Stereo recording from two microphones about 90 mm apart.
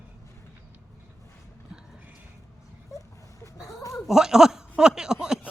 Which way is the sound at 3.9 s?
5° right (ahead or behind).